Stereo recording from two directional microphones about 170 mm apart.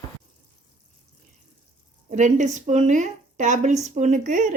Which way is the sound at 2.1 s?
45° right (ahead or behind).